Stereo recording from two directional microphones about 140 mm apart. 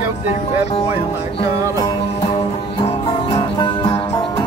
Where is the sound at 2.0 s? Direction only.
50° left (ahead or behind).